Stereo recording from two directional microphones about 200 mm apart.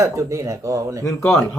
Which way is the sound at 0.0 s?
15° right (ahead or behind).